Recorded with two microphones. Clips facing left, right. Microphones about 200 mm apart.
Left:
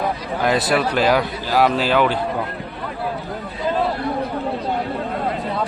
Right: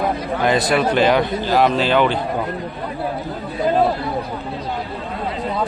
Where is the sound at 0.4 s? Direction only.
5° left (ahead or behind).